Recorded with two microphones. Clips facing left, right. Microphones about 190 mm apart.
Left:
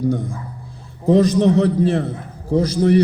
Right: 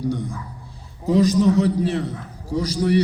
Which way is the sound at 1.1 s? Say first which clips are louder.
Left 2 dB; 55° left (ahead or behind).